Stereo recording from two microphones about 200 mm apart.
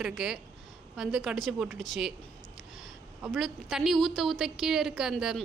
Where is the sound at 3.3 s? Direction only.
Centre (ahead or behind).